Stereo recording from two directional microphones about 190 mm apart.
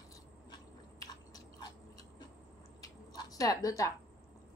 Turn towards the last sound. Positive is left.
turn(degrees=20)  # may be behind; listen again after turning